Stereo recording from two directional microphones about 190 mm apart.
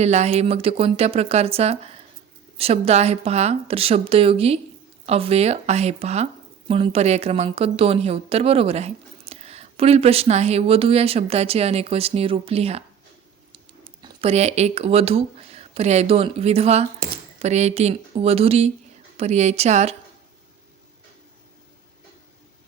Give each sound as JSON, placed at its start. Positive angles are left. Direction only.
{"t": 0.0, "sound": "a woman's voice", "side_deg": -35}
{"t": 14.0, "sound": "a woman's voice", "side_deg": -30}